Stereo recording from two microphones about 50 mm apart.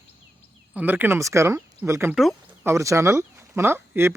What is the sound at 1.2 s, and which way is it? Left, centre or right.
Speech, right.